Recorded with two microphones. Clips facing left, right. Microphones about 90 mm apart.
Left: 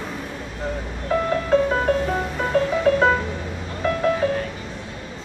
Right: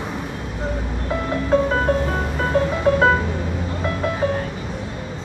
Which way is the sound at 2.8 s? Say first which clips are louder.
Right 2 dB; 35° right (ahead or behind).